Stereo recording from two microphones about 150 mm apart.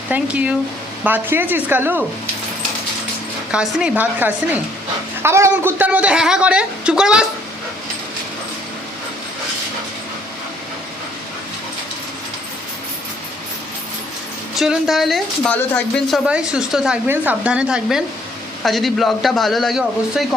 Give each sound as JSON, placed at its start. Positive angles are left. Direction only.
{"t": 0.1, "sound": "a woman's voice", "side_deg": -10}
{"t": 3.5, "sound": "a woman's voice", "side_deg": -5}
{"t": 14.5, "sound": "a woman's voice", "side_deg": 0}